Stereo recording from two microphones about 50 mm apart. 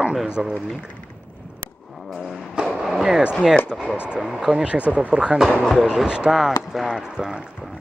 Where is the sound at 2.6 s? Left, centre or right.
Centre.